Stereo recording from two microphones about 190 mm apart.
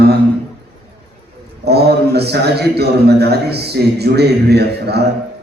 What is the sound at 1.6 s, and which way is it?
A man's voice, 60° right (ahead or behind).